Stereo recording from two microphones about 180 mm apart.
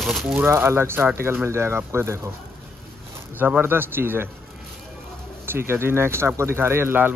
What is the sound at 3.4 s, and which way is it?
Speech, 10° right (ahead or behind).